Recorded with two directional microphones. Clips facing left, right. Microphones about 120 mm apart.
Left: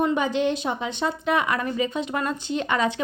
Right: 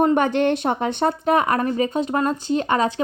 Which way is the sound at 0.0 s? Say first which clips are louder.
Right 5 dB; 55° right (ahead or behind).